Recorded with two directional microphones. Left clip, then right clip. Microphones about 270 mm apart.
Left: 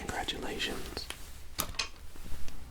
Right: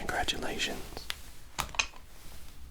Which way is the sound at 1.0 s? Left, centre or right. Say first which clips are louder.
Right 1 dB; centre.